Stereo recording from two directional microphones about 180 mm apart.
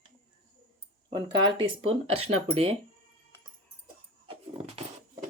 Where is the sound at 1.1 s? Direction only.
25° right (ahead or behind).